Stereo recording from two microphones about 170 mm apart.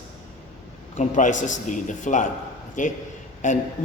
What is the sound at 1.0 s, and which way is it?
Speech, 45° left (ahead or behind).